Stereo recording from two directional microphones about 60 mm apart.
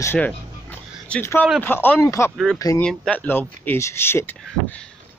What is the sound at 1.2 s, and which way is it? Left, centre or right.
Speech, left.